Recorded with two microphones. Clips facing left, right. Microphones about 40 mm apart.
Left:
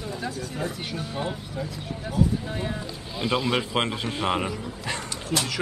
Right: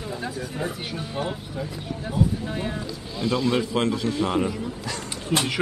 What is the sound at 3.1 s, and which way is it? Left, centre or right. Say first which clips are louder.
Speech: right 1 dB; centre.